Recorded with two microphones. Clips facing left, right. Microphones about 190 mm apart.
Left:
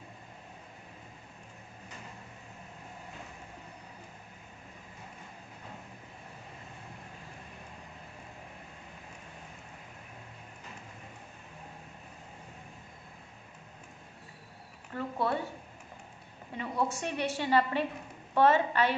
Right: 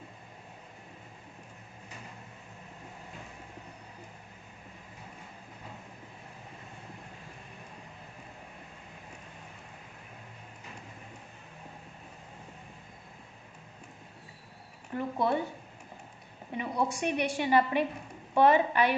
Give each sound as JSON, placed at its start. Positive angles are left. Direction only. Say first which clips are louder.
{"t": 14.9, "sound": "a woman's voice", "louder": "right 3 dB", "side_deg": -15}
{"t": 16.6, "sound": "a woman's voice", "louder": "right 2 dB", "side_deg": -15}